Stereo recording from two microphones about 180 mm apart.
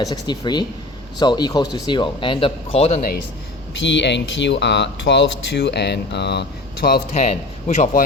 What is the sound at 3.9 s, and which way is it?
Speech, 80° left.